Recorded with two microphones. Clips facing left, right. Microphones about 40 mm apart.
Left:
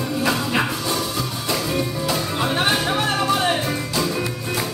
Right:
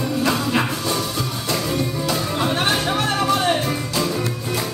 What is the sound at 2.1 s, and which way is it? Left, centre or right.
Music, centre.